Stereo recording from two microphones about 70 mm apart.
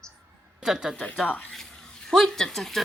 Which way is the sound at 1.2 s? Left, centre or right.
Centre.